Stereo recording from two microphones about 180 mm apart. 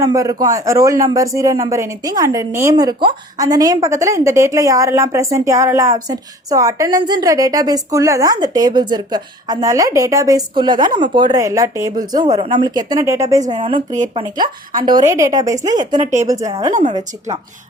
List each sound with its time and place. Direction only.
0.0 s a man's voice: 20° right (ahead or behind)
14.8 s speech: 50° right (ahead or behind)
15.0 s a man's voice: 20° right (ahead or behind)